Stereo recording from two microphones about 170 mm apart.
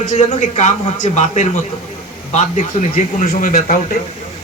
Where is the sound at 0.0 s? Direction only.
45° left (ahead or behind).